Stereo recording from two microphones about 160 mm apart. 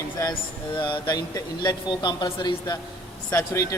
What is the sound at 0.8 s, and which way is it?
Speech, 25° left (ahead or behind).